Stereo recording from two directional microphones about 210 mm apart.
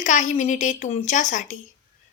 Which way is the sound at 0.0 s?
35° left (ahead or behind).